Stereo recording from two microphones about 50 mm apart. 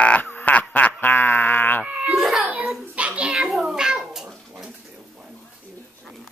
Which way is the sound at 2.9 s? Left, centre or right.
Right.